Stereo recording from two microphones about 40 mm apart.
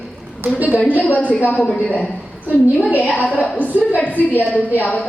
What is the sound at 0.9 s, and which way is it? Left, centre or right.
A woman's voice, left.